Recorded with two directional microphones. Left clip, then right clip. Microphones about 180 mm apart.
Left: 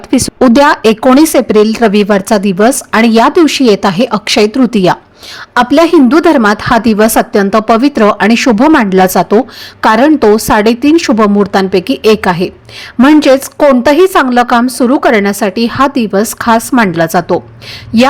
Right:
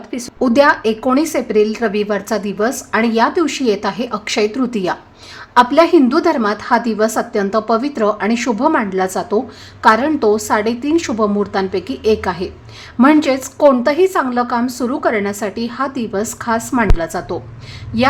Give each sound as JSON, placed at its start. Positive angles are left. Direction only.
{"t": 0.1, "sound": "speech", "side_deg": 40}